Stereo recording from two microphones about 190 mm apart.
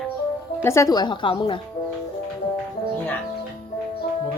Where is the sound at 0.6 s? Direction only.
15° left (ahead or behind).